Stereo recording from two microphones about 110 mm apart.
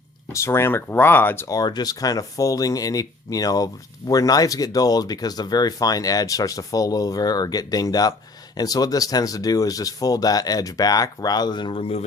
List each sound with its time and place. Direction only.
0.3 s speech: 25° left (ahead or behind)
1.5 s speech: 35° left (ahead or behind); by 12.0 s 60° left (ahead or behind)